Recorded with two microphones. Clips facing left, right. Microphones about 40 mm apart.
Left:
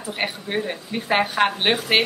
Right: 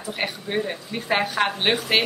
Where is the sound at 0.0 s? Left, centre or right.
Centre.